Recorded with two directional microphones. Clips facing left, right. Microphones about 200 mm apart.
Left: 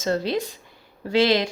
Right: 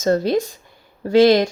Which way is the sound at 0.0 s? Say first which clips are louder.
Right 6 dB; 45° right (ahead or behind).